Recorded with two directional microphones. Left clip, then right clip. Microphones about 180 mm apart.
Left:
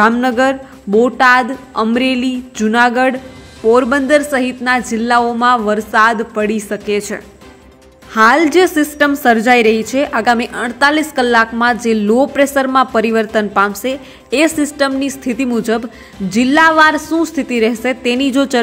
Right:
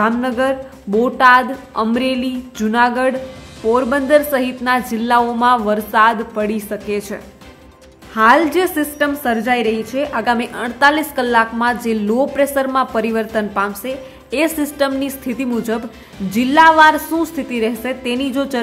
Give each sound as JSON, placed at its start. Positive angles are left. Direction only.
{"t": 0.0, "sound": "a woman's voice", "side_deg": 20}